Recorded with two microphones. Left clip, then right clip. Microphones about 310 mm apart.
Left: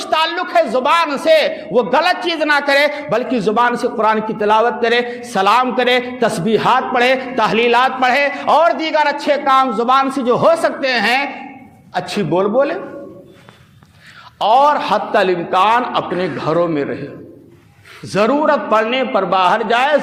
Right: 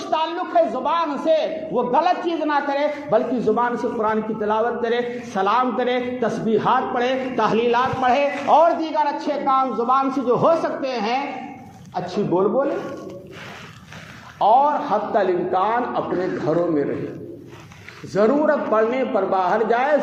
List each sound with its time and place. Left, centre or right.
0.0 s a man's voice: left
14.5 s a man's voice: left
18.1 s a man's voice: left